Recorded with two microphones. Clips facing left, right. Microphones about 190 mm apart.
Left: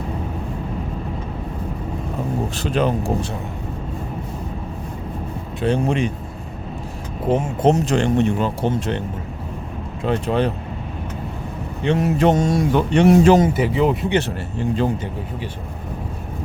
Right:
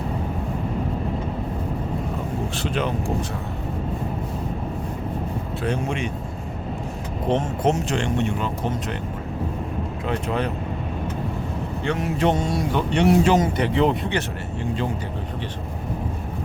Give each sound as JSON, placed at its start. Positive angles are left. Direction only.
{"t": 2.6, "sound": "speech", "side_deg": 40}
{"t": 5.6, "sound": "speech", "side_deg": 30}
{"t": 7.6, "sound": "speech", "side_deg": 35}
{"t": 10.1, "sound": "speech", "side_deg": 30}
{"t": 11.9, "sound": "speech", "side_deg": 20}
{"t": 12.2, "sound": "speech", "side_deg": 45}
{"t": 13.5, "sound": "speech", "side_deg": 5}